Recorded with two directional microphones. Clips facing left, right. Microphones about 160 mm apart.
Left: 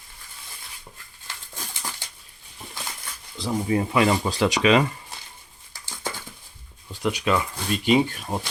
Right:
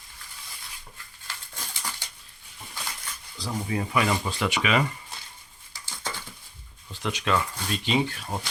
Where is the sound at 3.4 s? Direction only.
30° left (ahead or behind).